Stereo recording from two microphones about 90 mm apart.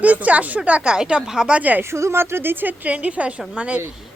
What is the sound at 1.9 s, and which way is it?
Speech, 30° right (ahead or behind).